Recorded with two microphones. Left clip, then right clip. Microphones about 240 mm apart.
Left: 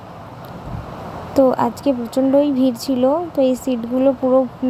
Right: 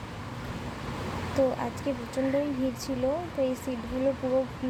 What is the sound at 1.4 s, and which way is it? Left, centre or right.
Speech, left.